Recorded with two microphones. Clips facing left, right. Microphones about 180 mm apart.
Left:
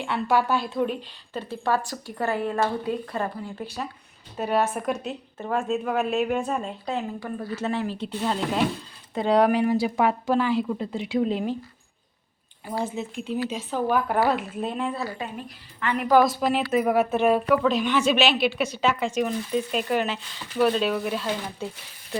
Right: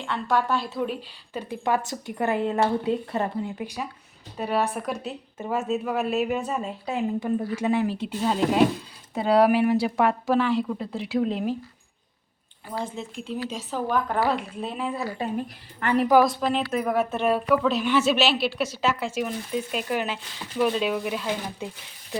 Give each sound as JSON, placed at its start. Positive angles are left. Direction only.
{"t": 0.0, "sound": "a woman's voice", "side_deg": 10}
{"t": 4.4, "sound": "a woman's voice", "side_deg": 0}
{"t": 7.2, "sound": "a woman's voice", "side_deg": -20}
{"t": 12.6, "sound": "a woman's voice", "side_deg": 10}
{"t": 16.2, "sound": "a woman's voice", "side_deg": 5}